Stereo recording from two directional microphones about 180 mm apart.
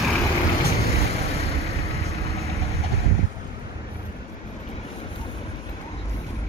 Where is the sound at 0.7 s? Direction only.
35° left (ahead or behind).